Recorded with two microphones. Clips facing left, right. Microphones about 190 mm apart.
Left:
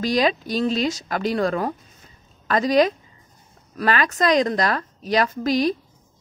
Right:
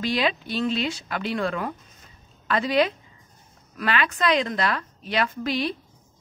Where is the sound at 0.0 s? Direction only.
40° left (ahead or behind).